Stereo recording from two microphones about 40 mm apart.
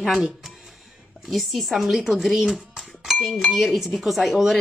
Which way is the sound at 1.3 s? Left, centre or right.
Centre.